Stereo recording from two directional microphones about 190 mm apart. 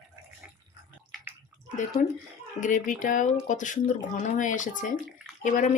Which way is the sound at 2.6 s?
40° left (ahead or behind).